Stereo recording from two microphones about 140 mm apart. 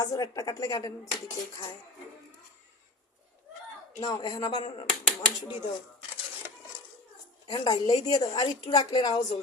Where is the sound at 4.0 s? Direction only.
30° left (ahead or behind).